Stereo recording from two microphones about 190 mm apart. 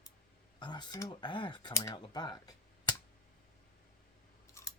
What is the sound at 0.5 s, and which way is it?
Speech, 25° left (ahead or behind).